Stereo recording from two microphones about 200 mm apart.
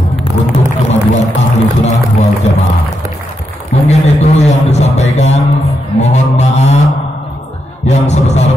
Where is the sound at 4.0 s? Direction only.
35° left (ahead or behind).